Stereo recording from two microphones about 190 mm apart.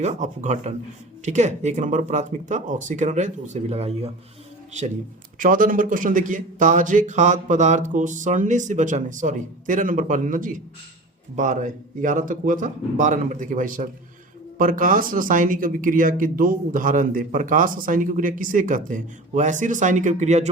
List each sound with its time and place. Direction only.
0.0 s speech: 40° right (ahead or behind)